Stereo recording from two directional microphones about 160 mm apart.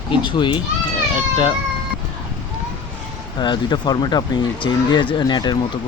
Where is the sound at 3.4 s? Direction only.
30° left (ahead or behind).